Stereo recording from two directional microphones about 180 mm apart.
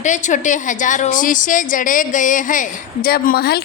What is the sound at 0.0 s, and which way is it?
A woman's voice, 45° left (ahead or behind).